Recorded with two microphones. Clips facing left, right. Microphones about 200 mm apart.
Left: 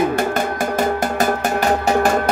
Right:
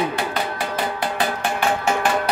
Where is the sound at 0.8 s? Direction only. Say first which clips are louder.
Left 5 dB; 45° left (ahead or behind).